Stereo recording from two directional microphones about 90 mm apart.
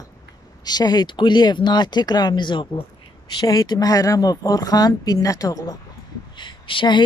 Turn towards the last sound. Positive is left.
turn(degrees=65)  # may be behind; listen again after turning